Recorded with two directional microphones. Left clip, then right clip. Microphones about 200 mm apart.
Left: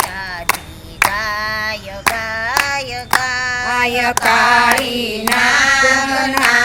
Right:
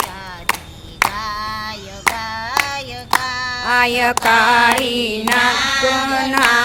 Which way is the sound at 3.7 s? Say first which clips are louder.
Right 3 dB; 15° right (ahead or behind).